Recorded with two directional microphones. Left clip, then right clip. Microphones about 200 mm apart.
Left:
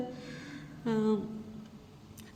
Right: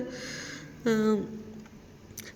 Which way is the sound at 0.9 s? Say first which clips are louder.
Right 5 dB; 30° right (ahead or behind).